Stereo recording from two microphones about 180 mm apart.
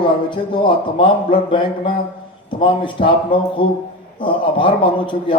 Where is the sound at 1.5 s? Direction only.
25° left (ahead or behind).